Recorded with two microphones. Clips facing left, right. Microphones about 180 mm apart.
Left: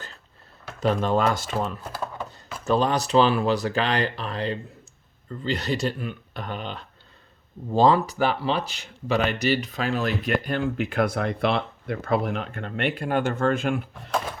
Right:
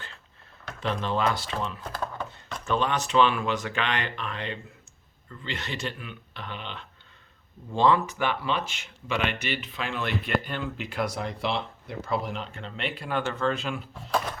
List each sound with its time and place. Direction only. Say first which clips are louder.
0.8 s speech: left 6 dB; 45° left (ahead or behind)
1.8 s a sound: left 1 dB; 5° left (ahead or behind)
2.6 s speech: left 5 dB; 35° left (ahead or behind); by 14.1 s 55° left (ahead or behind)